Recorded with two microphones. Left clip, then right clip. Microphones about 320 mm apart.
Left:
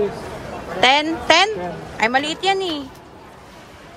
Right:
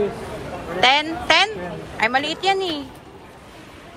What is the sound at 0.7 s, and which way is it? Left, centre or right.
Speech, centre.